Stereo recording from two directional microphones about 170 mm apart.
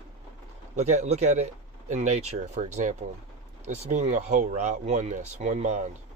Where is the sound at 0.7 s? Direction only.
40° right (ahead or behind).